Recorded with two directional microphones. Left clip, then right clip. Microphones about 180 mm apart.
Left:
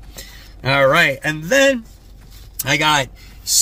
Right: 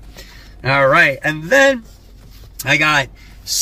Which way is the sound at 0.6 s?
30° left (ahead or behind).